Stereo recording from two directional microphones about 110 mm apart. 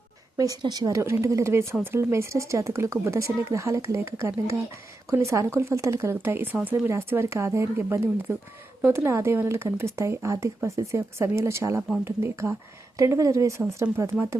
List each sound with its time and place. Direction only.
0.3 s speech: 35° right (ahead or behind)